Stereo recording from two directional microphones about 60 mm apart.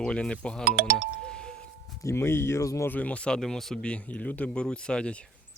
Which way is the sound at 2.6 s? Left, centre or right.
Left.